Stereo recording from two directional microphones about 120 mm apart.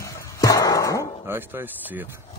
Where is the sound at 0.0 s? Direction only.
30° left (ahead or behind).